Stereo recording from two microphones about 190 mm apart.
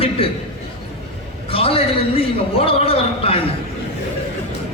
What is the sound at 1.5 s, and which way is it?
A man's voice, 30° left (ahead or behind).